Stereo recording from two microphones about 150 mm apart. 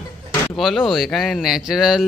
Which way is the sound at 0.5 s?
Centre (ahead or behind).